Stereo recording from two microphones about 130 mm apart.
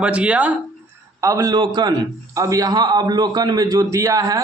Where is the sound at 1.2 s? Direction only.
25° right (ahead or behind).